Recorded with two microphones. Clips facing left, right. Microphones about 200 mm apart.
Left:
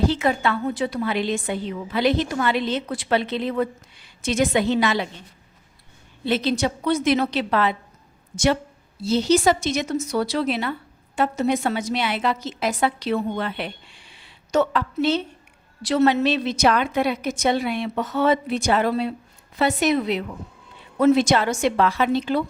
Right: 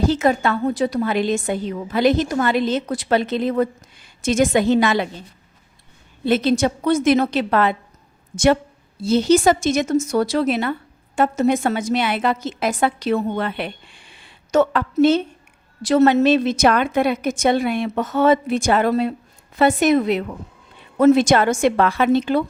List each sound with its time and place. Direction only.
0.0 s speech: 45° right (ahead or behind)
6.2 s speech: 50° right (ahead or behind)
9.0 s speech: 50° right (ahead or behind)